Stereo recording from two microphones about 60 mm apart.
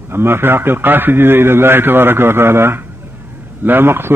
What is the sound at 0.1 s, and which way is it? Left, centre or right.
Speech, right.